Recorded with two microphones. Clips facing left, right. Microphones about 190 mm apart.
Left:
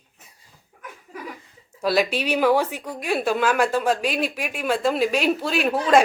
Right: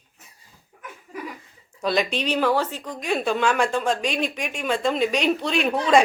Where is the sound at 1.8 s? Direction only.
5° left (ahead or behind).